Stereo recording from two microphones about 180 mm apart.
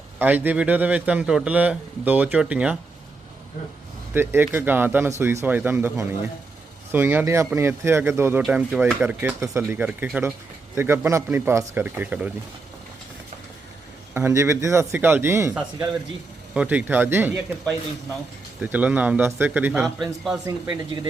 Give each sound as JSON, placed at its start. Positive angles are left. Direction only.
{"t": 0.2, "sound": "a man's voice", "side_deg": -10}
{"t": 4.1, "sound": "a man's voice", "side_deg": -10}
{"t": 8.4, "sound": "a man's voice", "side_deg": -5}
{"t": 14.1, "sound": "a man's voice", "side_deg": -10}
{"t": 20.7, "sound": "speech", "side_deg": -25}